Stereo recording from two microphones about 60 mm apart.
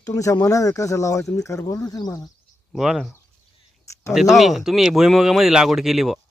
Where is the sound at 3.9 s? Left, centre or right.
Left.